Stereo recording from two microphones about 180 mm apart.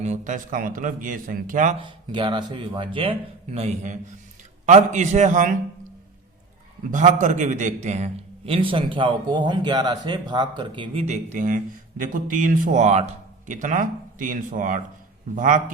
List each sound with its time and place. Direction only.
0.0 s speech: 40° right (ahead or behind)
1.8 s speech: 25° right (ahead or behind); by 5.5 s 45° right (ahead or behind)
6.9 s a man's voice: 45° right (ahead or behind)